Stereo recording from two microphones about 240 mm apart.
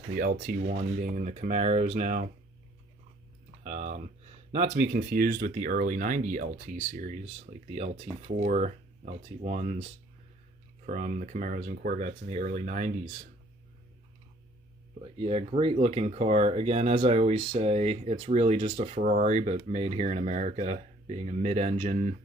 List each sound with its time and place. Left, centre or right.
0.1 s speech: right
3.6 s speech: right
10.8 s speech: right
15.2 s speech: right